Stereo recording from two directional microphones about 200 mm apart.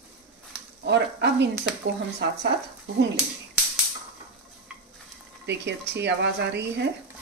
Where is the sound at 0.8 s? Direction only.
60° right (ahead or behind).